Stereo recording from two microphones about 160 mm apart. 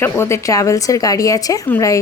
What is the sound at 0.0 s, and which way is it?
A woman's voice, 15° left (ahead or behind).